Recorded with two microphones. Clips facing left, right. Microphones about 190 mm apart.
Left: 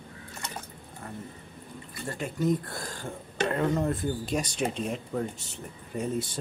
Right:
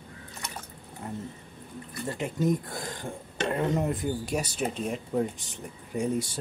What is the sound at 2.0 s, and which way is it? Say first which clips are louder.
Speech: right 1 dB; 20° right (ahead or behind).